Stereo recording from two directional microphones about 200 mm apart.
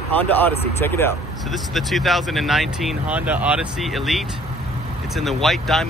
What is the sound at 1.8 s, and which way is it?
Speech, centre (ahead or behind).